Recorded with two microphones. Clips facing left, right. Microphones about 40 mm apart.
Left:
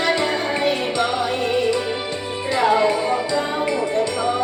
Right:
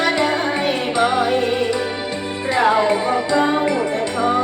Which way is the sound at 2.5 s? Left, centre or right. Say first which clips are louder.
Right 1 dB; centre.